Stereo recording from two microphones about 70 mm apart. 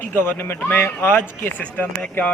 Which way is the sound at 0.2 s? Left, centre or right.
Left.